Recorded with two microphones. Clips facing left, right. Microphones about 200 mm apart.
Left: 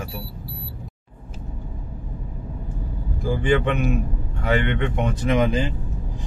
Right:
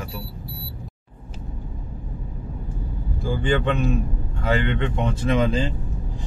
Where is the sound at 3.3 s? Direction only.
15° left (ahead or behind).